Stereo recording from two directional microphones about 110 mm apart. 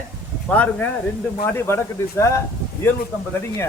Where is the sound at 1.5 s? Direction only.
25° left (ahead or behind).